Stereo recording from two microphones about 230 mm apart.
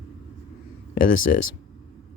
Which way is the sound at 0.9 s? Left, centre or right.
Left.